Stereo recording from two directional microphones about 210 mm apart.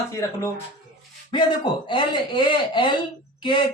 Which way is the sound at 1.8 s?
20° left (ahead or behind).